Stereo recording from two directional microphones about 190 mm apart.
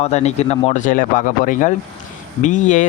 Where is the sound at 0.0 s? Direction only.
35° left (ahead or behind).